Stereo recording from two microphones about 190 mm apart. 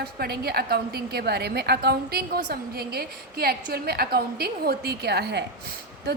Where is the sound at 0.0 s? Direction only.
55° right (ahead or behind).